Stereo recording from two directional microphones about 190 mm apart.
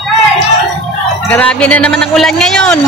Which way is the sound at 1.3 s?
5° left (ahead or behind).